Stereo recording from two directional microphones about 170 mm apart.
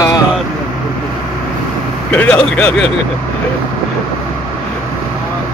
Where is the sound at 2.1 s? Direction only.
5° left (ahead or behind).